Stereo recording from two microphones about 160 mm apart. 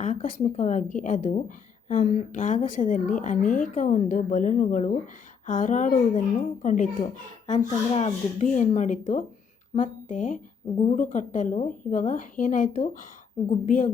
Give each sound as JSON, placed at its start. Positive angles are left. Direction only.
{"t": 0.0, "sound": "a woman's voice", "side_deg": 50}